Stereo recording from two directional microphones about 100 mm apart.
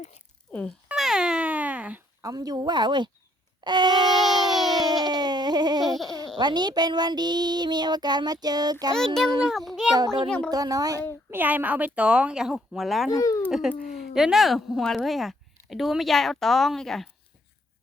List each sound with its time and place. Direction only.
0.9 s cat: 5° right (ahead or behind)
2.2 s child singing: 40° right (ahead or behind)
4.3 s a sound: 45° right (ahead or behind)
6.4 s child singing: 45° right (ahead or behind)
9.0 s speech: 5° left (ahead or behind)
9.9 s child singing: 45° right (ahead or behind)
10.2 s speech: 10° left (ahead or behind)
10.5 s speech: 40° right (ahead or behind)
11.3 s speech: 20° right (ahead or behind); by 13.1 s centre (ahead or behind)
13.1 s a child's voice: 35° left (ahead or behind)
13.5 s speech: 5° right (ahead or behind)